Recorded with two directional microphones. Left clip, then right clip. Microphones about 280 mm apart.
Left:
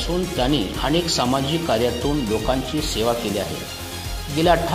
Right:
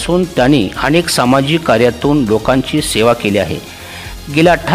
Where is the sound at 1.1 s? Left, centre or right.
Right.